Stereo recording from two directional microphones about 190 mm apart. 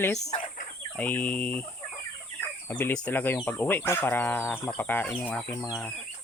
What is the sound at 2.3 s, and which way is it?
Speech, 10° left (ahead or behind).